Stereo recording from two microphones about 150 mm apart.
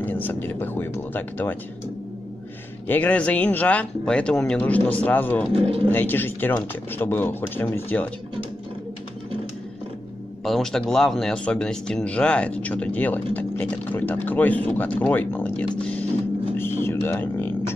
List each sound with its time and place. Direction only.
0.0 s speech: 10° left (ahead or behind)
2.9 s speech: 10° left (ahead or behind)
5.5 s speech: 40° right (ahead or behind)
5.9 s speech: 15° left (ahead or behind)
10.4 s speech: centre (ahead or behind)
15.8 s a sound: 10° left (ahead or behind)